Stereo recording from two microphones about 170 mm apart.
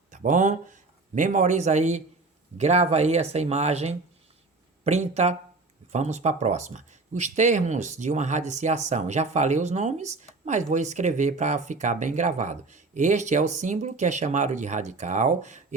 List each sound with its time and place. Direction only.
0.1 s speech: 50° right (ahead or behind)